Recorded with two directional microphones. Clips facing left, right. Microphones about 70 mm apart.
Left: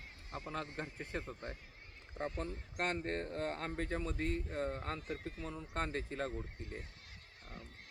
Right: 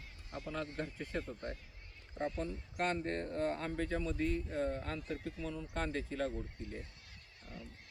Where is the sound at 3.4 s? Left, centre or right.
Left.